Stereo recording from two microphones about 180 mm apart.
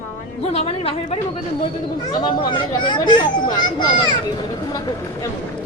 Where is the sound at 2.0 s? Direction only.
20° left (ahead or behind).